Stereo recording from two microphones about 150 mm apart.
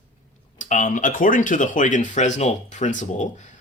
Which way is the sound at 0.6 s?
60° left (ahead or behind).